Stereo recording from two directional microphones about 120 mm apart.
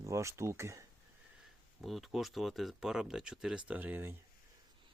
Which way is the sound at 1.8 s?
Centre (ahead or behind).